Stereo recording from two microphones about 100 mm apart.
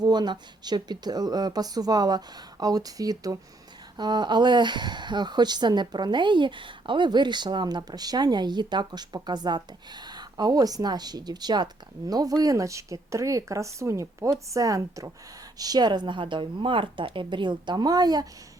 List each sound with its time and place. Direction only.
0.0 s speech: 45° right (ahead or behind)